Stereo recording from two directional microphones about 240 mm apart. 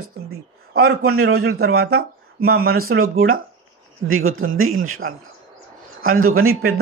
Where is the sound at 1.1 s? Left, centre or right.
Right.